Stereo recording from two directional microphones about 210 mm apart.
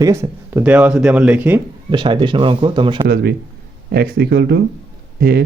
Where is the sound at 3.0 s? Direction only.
50° right (ahead or behind).